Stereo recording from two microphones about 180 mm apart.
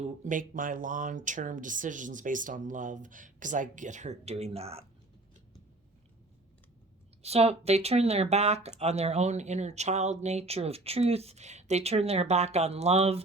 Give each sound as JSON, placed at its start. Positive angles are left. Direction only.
{"t": 0.0, "sound": "speech", "side_deg": -45}
{"t": 7.2, "sound": "speech", "side_deg": -35}